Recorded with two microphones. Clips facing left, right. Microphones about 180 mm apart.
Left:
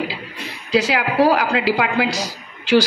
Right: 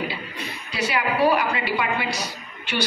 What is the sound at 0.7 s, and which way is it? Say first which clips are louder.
Speech: left 7 dB; 90° left.